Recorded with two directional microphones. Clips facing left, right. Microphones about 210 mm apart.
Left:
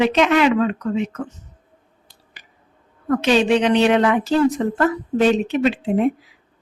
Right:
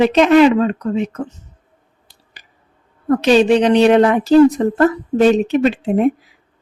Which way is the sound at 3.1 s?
35° right (ahead or behind).